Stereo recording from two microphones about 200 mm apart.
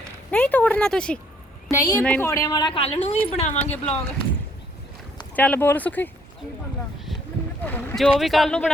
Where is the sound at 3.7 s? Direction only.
5° left (ahead or behind).